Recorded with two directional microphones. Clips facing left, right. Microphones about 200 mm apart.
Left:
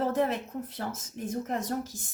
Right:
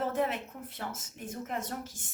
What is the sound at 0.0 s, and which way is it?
Speech, 40° left (ahead or behind).